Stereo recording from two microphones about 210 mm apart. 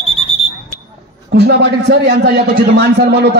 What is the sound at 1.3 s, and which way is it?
A man's voice, 50° right (ahead or behind).